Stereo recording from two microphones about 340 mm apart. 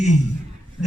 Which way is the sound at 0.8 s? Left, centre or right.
Centre.